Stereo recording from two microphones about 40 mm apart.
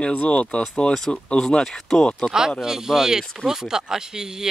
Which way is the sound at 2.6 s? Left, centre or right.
Centre.